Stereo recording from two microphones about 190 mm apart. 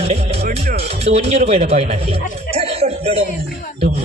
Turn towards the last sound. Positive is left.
turn(degrees=-30)  # may be behind; listen again after turning